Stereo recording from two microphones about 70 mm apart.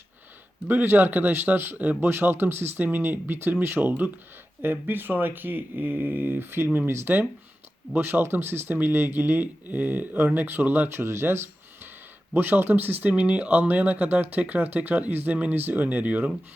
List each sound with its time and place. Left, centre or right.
0.7 s speech: right